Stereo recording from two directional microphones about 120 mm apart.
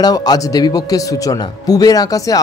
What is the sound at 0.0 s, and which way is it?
Speech, 35° left (ahead or behind).